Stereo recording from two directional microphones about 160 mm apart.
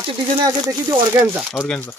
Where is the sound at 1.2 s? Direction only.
10° right (ahead or behind).